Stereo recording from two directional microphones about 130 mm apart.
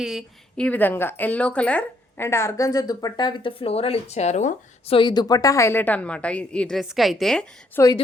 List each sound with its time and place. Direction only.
0.0 s speech: 5° right (ahead or behind)
0.5 s speech: 10° left (ahead or behind); by 4.5 s 65° left (ahead or behind)
4.9 s a woman's voice: 35° left (ahead or behind); by 7.4 s 5° left (ahead or behind)
7.8 s speech: 20° left (ahead or behind)